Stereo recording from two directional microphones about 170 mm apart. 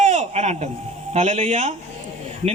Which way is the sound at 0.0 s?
40° right (ahead or behind).